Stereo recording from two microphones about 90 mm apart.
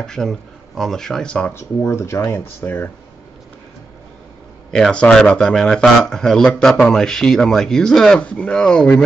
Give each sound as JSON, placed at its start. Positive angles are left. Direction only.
{"t": 0.0, "sound": "speech", "side_deg": 5}
{"t": 1.5, "sound": "speech", "side_deg": 30}
{"t": 4.6, "sound": "speech", "side_deg": 5}